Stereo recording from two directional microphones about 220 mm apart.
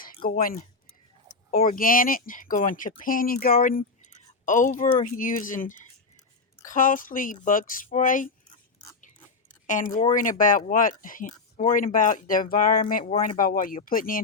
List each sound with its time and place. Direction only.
0.0 s speech: 40° left (ahead or behind)
9.6 s speech: 35° left (ahead or behind)